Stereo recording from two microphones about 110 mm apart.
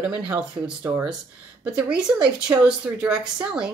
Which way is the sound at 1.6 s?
10° right (ahead or behind).